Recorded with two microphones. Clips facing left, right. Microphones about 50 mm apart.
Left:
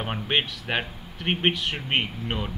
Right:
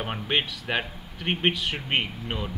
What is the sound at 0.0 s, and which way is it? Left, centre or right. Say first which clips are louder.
Speech: left 1 dB; centre.